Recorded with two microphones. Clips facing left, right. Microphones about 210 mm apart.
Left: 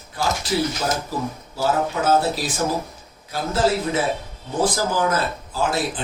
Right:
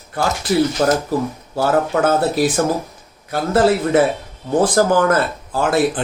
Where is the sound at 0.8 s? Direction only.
60° right (ahead or behind).